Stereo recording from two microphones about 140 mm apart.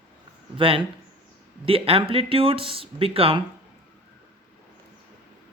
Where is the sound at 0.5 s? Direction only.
40° right (ahead or behind).